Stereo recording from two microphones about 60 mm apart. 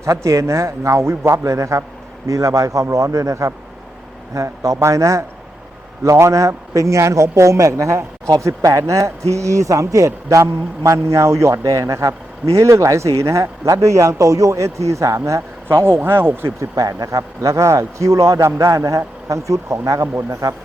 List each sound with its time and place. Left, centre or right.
0.0 s speech: right
16.6 s speech: right